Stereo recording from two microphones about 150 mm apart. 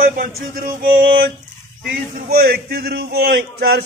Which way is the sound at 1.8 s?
80° right.